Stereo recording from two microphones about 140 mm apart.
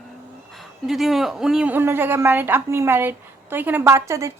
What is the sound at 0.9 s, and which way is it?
A woman's voice, centre (ahead or behind).